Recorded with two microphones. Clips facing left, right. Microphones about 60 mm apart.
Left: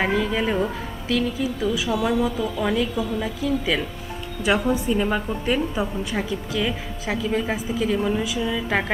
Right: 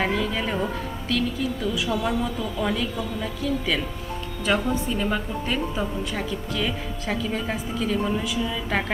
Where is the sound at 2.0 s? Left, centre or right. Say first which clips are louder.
Left 4 dB; centre.